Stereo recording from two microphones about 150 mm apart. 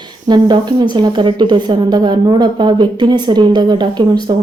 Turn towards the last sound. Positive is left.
turn(degrees=-30)  # may be behind; listen again after turning